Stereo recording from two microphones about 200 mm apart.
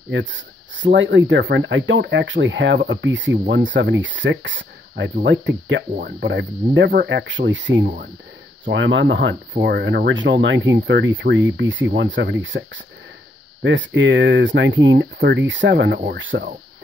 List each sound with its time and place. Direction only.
0.1 s speech: 65° right (ahead or behind)